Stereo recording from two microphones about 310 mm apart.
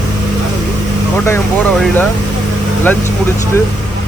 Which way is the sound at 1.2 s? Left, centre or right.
Centre.